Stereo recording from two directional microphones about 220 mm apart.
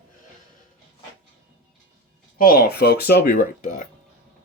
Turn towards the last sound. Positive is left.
turn(degrees=40)  # may be behind; listen again after turning